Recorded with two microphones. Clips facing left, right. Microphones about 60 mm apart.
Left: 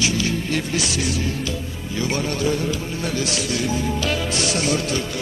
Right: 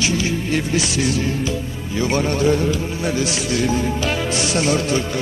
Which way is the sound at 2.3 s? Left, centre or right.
Right.